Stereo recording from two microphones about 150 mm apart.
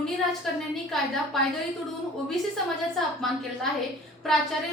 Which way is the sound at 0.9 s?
Centre (ahead or behind).